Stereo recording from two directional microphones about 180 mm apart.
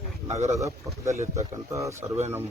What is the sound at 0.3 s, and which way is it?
Speech, 35° right (ahead or behind).